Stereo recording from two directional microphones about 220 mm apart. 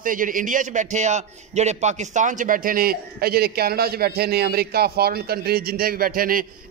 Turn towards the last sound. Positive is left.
turn(degrees=-40)  # may be behind; listen again after turning